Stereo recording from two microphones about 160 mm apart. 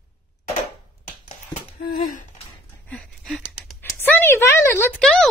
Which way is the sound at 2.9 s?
5° left (ahead or behind).